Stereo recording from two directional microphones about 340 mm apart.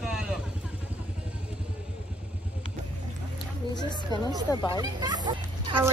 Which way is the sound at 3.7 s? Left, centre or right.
Centre.